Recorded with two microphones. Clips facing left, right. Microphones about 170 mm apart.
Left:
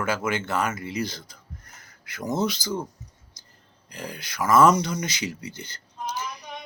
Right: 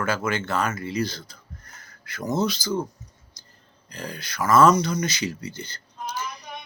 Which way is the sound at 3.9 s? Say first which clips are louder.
Right 1 dB; 15° left (ahead or behind).